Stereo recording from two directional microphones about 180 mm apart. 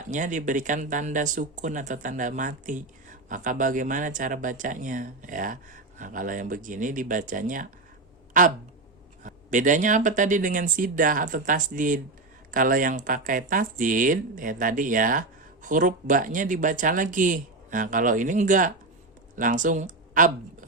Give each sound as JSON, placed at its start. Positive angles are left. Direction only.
{"t": 0.1, "sound": "speech", "side_deg": -45}